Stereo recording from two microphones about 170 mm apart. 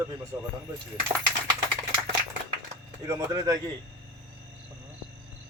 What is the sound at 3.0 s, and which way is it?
Speech, 20° right (ahead or behind).